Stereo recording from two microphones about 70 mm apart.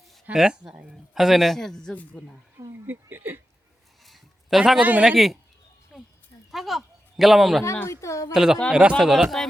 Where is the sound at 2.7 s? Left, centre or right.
Right.